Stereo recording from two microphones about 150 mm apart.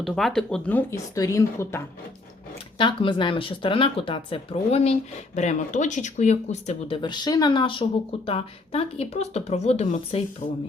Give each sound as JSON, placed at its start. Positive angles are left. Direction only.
{"t": 0.0, "sound": "speech", "side_deg": 0}
{"t": 2.7, "sound": "speech", "side_deg": 35}